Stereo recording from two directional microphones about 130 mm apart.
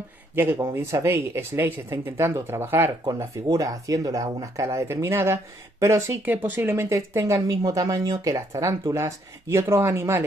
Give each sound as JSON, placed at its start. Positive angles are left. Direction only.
{"t": 0.4, "sound": "speech", "side_deg": -20}